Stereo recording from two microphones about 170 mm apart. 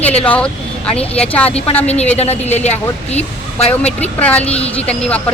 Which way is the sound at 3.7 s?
10° left (ahead or behind).